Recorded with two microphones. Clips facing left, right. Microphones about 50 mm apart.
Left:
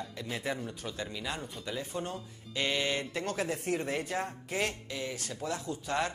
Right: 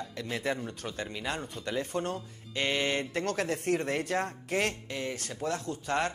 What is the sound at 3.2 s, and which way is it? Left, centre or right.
Speech, right.